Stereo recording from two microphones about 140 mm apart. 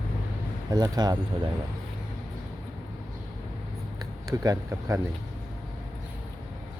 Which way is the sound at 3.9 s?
25° right (ahead or behind).